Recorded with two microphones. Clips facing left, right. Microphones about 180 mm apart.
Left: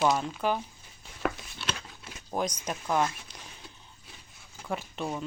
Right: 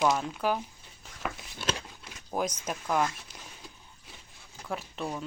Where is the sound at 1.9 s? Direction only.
5° right (ahead or behind).